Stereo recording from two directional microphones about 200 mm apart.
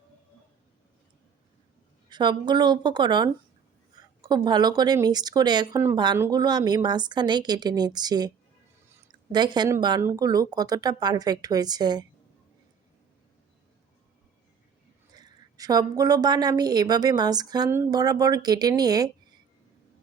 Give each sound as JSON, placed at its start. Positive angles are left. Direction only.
{"t": 2.0, "sound": "a woman's voice", "side_deg": -20}
{"t": 15.1, "sound": "a woman's voice", "side_deg": -20}